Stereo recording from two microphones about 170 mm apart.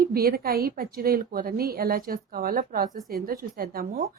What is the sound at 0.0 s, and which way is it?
Speech, 60° right (ahead or behind).